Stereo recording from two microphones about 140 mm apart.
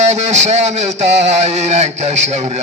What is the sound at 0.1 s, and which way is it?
Speech, 50° right (ahead or behind).